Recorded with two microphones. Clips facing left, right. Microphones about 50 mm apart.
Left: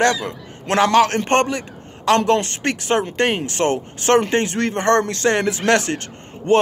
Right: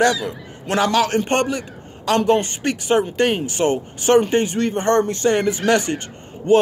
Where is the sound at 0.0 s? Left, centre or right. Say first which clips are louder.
Even; left.